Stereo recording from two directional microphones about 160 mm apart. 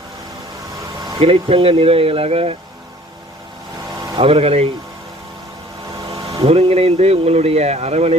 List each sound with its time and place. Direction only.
1.2 s speech: 35° right (ahead or behind)
4.0 s speech: 30° right (ahead or behind)
6.1 s a sound: 35° right (ahead or behind)
6.4 s speech: 40° right (ahead or behind)